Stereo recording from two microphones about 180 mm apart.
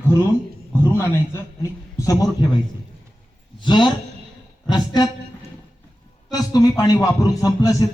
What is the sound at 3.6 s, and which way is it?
A man's voice, 25° left (ahead or behind).